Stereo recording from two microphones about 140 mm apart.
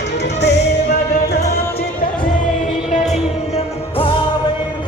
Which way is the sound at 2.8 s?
55° left (ahead or behind).